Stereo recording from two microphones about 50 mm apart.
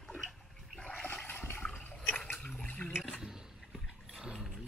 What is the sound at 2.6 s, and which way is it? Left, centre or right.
Water, left.